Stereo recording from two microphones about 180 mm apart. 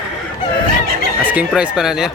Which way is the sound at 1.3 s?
5° right (ahead or behind).